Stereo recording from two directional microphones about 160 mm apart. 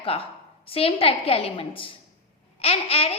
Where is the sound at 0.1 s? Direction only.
35° left (ahead or behind).